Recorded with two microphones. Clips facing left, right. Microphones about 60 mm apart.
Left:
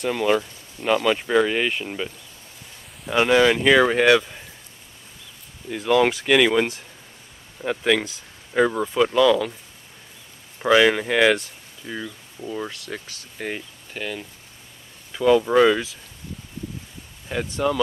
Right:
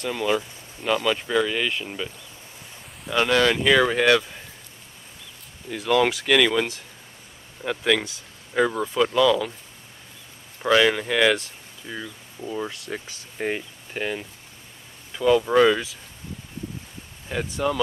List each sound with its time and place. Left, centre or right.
0.0 s speech: centre
5.7 s speech: centre
10.6 s speech: centre
12.7 s speech: centre
15.1 s speech: centre
17.3 s speech: centre